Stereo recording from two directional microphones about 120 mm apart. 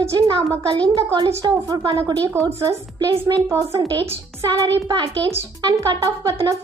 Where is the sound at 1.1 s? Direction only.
35° right (ahead or behind).